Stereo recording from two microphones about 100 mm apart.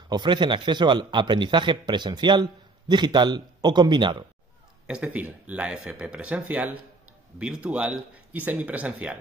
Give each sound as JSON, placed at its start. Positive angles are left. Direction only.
{"t": 0.1, "sound": "a man's voice", "side_deg": -50}
{"t": 4.8, "sound": "speech", "side_deg": -10}